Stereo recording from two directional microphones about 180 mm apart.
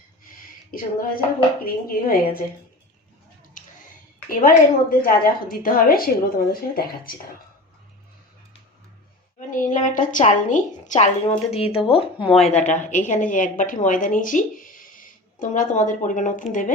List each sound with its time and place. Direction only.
0.7 s a woman's voice: 50° left (ahead or behind)
3.6 s a sound: 45° left (ahead or behind)
4.3 s a woman's voice: 55° left (ahead or behind)
9.5 s a woman's voice: 45° left (ahead or behind)